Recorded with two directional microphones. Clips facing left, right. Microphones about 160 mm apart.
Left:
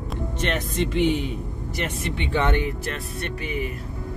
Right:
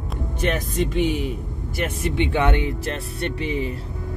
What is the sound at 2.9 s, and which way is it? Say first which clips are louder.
Speech: right 3 dB; 30° right (ahead or behind).